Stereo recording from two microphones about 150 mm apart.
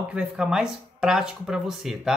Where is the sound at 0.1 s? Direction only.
5° right (ahead or behind).